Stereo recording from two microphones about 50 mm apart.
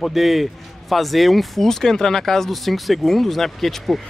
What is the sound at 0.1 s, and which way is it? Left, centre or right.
Speech, centre.